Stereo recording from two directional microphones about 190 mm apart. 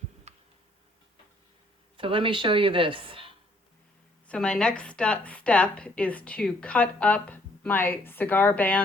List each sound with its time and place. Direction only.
0.3 s tick: 35° right (ahead or behind)
2.0 s speech: 25° right (ahead or behind)
4.3 s a woman's voice: 5° left (ahead or behind)